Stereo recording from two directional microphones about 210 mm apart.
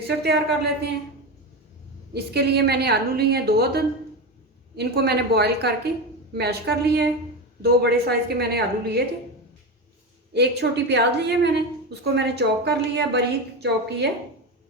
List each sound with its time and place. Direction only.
0.2 s a woman's voice: 50° right (ahead or behind)
2.1 s a woman's voice: 50° right (ahead or behind)
10.3 s a woman's voice: 55° right (ahead or behind)